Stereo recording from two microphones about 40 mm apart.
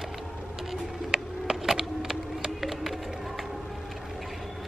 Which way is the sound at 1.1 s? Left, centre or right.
Centre.